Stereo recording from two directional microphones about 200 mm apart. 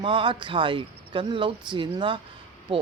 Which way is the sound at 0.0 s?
25° right (ahead or behind).